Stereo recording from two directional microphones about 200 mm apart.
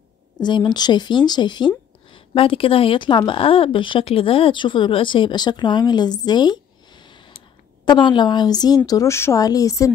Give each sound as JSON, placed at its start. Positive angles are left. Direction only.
{"t": 0.4, "sound": "speech", "side_deg": 20}